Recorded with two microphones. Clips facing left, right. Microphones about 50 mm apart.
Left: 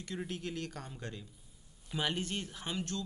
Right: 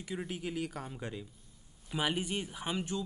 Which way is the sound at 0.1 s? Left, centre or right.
Centre.